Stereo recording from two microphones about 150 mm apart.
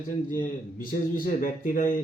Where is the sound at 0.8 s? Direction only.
65° left (ahead or behind).